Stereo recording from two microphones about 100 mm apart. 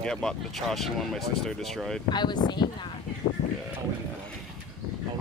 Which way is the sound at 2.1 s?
45° left (ahead or behind).